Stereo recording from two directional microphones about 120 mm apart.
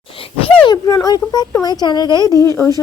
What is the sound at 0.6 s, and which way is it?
A woman's voice, 35° left (ahead or behind).